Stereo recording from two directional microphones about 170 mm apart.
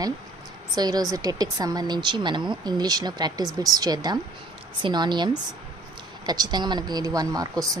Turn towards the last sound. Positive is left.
turn(degrees=-20)  # may be behind; listen again after turning